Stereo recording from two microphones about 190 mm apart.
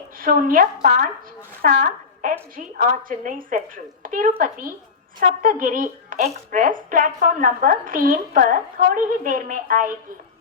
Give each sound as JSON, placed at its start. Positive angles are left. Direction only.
{"t": 0.2, "sound": "speech", "side_deg": -50}